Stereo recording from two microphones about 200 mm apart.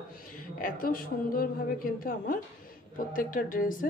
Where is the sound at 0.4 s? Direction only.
45° left (ahead or behind).